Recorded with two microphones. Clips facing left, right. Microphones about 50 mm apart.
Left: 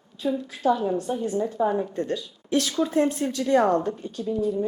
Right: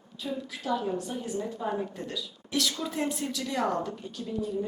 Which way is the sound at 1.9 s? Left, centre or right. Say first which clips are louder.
Left 9 dB; left.